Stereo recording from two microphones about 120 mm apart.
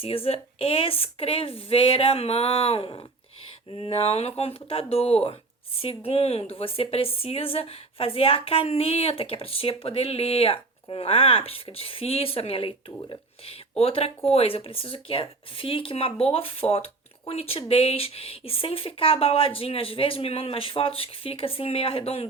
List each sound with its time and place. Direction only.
0.0 s speech: 50° left (ahead or behind)